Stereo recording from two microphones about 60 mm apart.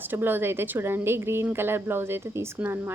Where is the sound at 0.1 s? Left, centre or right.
Right.